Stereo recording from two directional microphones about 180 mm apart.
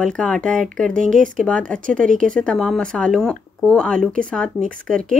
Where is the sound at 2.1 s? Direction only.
50° right (ahead or behind).